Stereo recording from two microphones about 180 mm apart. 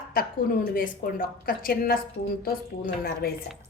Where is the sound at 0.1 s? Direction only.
55° left (ahead or behind).